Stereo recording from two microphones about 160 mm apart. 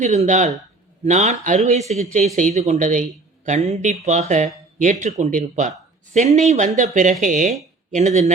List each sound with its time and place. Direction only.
0.0 s speech: 50° right (ahead or behind)